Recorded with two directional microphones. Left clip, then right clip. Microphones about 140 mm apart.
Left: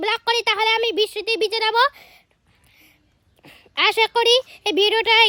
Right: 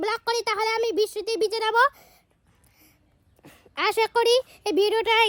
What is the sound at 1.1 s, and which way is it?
Speech, 25° left (ahead or behind).